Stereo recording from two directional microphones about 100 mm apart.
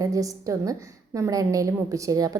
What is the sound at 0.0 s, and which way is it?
A woman's voice, 35° right (ahead or behind).